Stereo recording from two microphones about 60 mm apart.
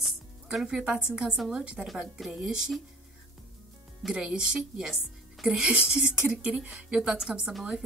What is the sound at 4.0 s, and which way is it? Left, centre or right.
A woman's voice, centre.